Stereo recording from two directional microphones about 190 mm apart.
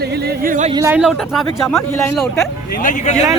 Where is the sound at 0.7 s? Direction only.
15° right (ahead or behind).